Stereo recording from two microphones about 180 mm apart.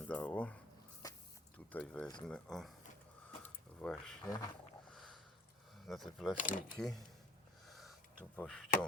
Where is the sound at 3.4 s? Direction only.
5° left (ahead or behind).